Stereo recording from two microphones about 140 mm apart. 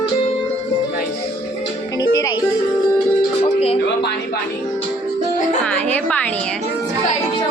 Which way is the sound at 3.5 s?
45° left (ahead or behind).